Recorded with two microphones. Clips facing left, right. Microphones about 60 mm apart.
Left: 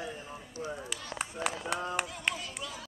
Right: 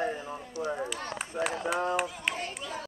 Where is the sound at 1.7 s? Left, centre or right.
Centre.